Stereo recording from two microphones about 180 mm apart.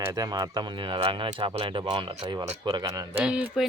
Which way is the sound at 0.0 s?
20° right (ahead or behind).